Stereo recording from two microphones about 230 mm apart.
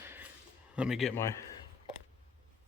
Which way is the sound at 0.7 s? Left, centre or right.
Centre.